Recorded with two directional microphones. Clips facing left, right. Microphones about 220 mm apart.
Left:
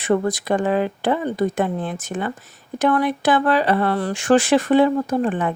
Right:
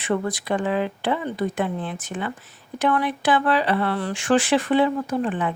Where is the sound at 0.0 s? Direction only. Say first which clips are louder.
Left 5 dB; 40° left (ahead or behind).